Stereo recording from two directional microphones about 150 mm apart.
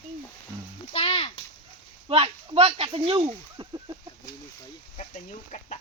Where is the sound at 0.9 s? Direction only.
40° left (ahead or behind).